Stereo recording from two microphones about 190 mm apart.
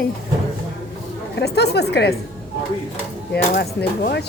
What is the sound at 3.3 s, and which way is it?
Speech, 55° left (ahead or behind).